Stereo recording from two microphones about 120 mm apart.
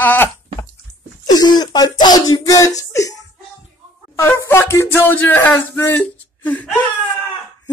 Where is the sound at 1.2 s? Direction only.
35° left (ahead or behind).